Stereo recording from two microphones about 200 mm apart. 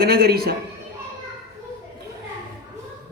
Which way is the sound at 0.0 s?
50° right (ahead or behind).